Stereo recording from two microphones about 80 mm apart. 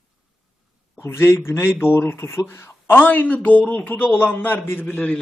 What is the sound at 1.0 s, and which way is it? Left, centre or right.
A man's voice, left.